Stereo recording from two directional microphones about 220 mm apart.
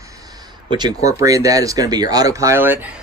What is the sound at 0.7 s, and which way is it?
Speech, 20° right (ahead or behind).